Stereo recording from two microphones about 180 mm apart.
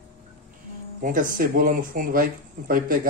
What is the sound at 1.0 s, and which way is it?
Speech, 45° right (ahead or behind).